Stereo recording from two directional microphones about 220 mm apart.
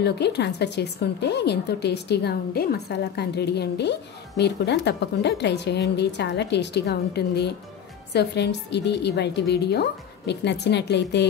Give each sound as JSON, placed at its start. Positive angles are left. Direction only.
{"t": 0.0, "sound": "speech", "side_deg": 50}